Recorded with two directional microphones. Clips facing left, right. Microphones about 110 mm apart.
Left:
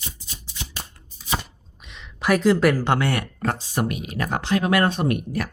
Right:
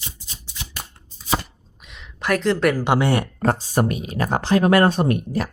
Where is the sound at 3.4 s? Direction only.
40° right (ahead or behind).